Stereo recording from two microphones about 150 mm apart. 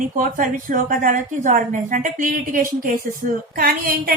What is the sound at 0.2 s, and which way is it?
A woman's voice, 65° right (ahead or behind).